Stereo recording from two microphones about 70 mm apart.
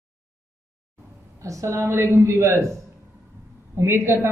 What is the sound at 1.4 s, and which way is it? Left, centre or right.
A man's voice, right.